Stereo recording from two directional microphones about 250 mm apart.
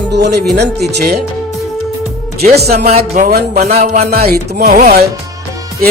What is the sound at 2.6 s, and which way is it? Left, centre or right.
Music, right.